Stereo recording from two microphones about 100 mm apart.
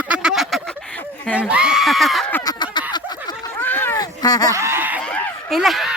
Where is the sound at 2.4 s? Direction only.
50° left (ahead or behind).